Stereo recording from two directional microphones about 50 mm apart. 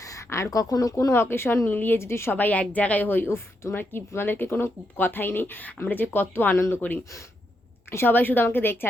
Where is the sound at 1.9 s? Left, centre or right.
Left.